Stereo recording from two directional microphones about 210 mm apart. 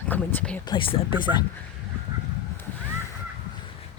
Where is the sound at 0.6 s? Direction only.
25° left (ahead or behind).